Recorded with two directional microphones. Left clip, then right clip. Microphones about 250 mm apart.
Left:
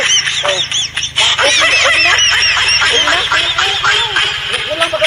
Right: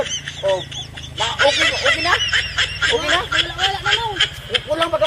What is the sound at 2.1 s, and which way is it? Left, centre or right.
Goose, left.